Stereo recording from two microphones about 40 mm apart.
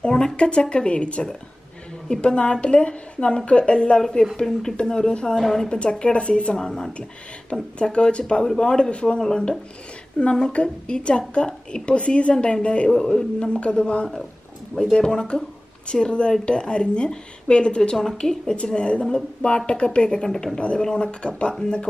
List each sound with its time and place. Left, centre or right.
0.0 s speech: left
4.5 s a man's voice: centre
4.8 s a man's voice: centre
5.7 s speech: left
6.6 s a man's voice: centre